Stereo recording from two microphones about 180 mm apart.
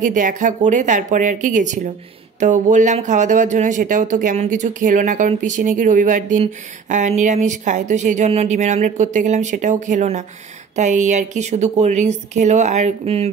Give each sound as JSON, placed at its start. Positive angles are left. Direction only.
{"t": 0.0, "sound": "speech", "side_deg": -45}